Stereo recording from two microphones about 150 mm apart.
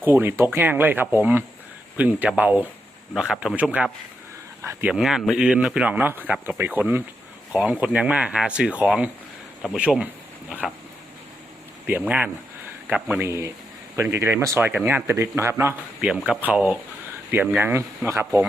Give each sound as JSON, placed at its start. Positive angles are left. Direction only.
{"t": 0.0, "sound": "speech", "side_deg": -15}
{"t": 4.9, "sound": "speech", "side_deg": -5}
{"t": 11.9, "sound": "speech", "side_deg": -10}